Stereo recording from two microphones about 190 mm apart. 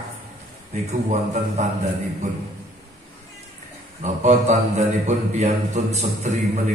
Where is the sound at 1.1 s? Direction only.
40° right (ahead or behind).